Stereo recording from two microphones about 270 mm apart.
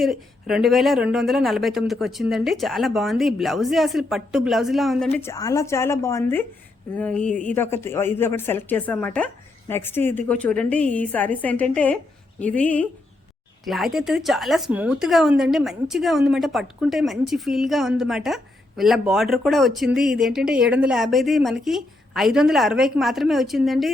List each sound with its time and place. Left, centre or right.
0.0 s speech: centre